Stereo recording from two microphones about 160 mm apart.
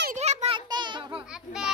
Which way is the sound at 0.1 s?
45° right (ahead or behind).